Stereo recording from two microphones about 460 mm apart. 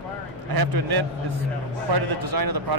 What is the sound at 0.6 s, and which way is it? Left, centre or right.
A man's voice, right.